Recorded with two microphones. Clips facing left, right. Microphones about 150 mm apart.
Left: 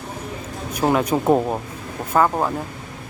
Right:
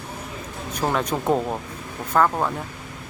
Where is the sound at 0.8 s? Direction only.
10° left (ahead or behind).